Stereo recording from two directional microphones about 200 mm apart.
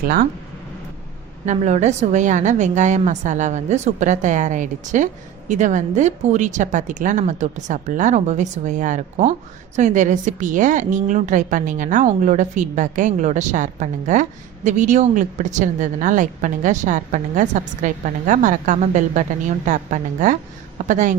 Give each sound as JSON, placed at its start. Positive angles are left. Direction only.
{"t": 1.5, "sound": "a woman's voice", "side_deg": -35}